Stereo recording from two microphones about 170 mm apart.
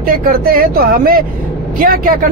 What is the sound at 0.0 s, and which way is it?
Speech, 60° right (ahead or behind).